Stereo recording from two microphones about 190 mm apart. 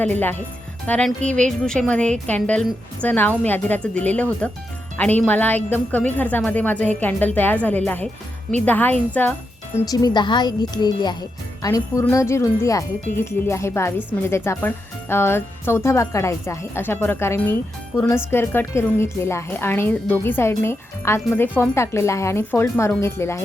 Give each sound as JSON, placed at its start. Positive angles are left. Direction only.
{"t": 0.0, "sound": "a woman's voice", "side_deg": 10}
{"t": 9.8, "sound": "a woman's voice", "side_deg": 20}